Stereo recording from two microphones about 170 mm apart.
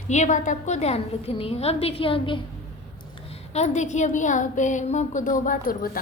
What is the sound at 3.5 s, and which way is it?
A woman's voice, 40° left (ahead or behind).